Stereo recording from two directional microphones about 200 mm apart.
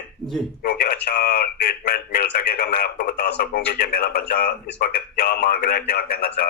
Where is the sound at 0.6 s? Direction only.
50° left (ahead or behind).